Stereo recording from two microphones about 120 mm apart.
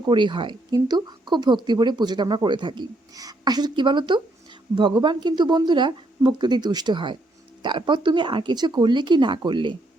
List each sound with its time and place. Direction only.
0.1 s speech: 40° right (ahead or behind)